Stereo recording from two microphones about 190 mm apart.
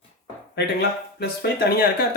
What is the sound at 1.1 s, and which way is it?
Speech, 55° left (ahead or behind).